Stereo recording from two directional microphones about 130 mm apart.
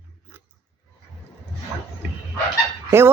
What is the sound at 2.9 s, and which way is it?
Goose, 20° right (ahead or behind).